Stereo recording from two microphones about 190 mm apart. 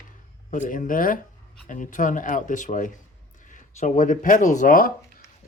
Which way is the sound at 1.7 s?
45° left (ahead or behind).